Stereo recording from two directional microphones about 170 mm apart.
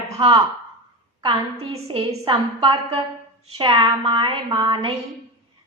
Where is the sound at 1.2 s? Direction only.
35° right (ahead or behind).